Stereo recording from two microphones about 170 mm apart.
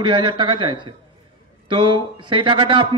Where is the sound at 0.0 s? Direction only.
30° right (ahead or behind).